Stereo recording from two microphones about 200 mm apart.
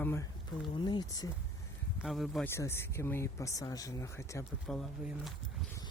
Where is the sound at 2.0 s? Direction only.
Centre (ahead or behind).